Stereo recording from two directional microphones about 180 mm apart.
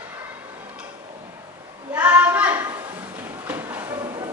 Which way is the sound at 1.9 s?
10° right (ahead or behind).